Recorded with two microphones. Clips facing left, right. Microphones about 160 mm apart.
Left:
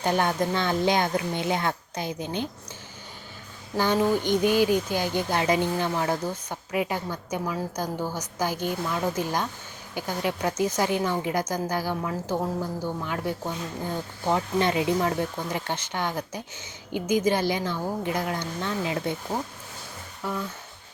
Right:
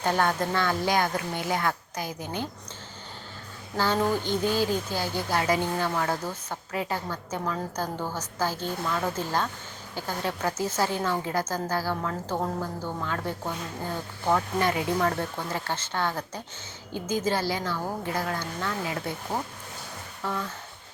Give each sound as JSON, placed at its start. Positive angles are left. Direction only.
{"t": 0.0, "sound": "a child's voice", "side_deg": 20}
{"t": 3.9, "sound": "a child's voice", "side_deg": 15}
{"t": 20.2, "sound": "speech", "side_deg": 10}